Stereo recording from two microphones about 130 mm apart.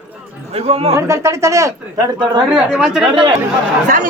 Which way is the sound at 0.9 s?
25° right (ahead or behind).